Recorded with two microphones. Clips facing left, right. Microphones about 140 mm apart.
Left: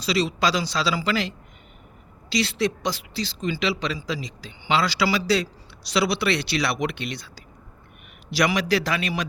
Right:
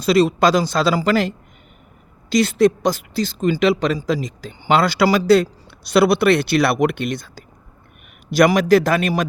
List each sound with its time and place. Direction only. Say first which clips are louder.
0.0 s speech: right 8 dB; 50° right (ahead or behind)
2.3 s speech: right 9 dB; 50° right (ahead or behind)